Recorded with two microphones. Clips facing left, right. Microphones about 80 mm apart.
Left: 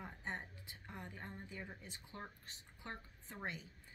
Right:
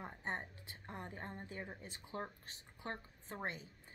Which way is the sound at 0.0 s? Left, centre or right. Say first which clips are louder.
Right 3 dB; right.